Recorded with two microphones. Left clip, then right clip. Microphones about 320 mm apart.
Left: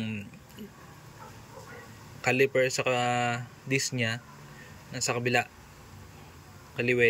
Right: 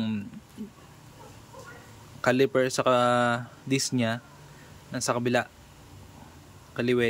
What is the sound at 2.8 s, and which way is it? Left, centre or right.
Speech, centre.